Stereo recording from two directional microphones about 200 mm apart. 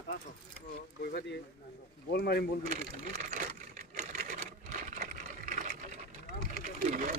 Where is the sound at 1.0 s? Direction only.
55° left (ahead or behind).